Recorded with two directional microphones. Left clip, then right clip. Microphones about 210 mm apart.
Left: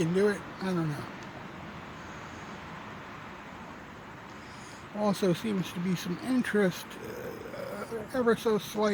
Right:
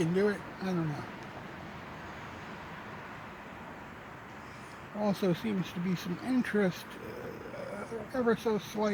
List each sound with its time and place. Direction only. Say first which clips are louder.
0.0 s speech: left 2 dB; 15° left (ahead or behind)
4.9 s speech: left 3 dB; 20° left (ahead or behind)
8.1 s speech: left 3 dB; 15° left (ahead or behind)